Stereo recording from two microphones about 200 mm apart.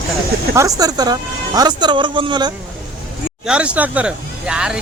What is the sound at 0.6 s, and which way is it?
Speech, 15° right (ahead or behind).